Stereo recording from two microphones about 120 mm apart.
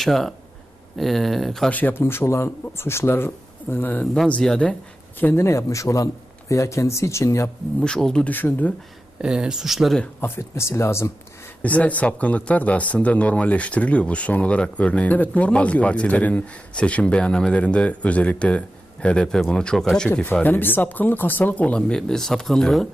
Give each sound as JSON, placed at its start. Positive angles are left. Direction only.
{"t": 0.0, "sound": "speech", "side_deg": 0}
{"t": 1.7, "sound": "speech", "side_deg": 15}
{"t": 5.2, "sound": "speech", "side_deg": 20}
{"t": 7.8, "sound": "speech", "side_deg": 5}
{"t": 9.2, "sound": "speech", "side_deg": -5}
{"t": 10.0, "sound": "speech", "side_deg": 15}
{"t": 11.6, "sound": "speech", "side_deg": 10}
{"t": 20.3, "sound": "speech", "side_deg": 15}